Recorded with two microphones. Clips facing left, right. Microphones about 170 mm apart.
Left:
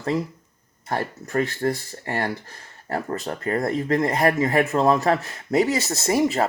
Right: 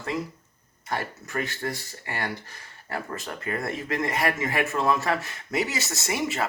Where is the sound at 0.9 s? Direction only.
30° left (ahead or behind).